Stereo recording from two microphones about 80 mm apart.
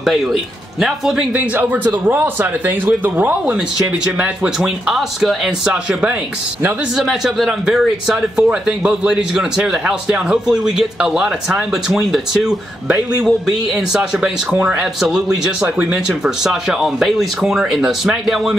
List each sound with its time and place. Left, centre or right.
0.0 s a man's voice: centre
1.3 s speech: right
3.5 s speech: centre
5.7 s speech: centre
7.0 s speech: centre
14.5 s speech: right
14.8 s speech: centre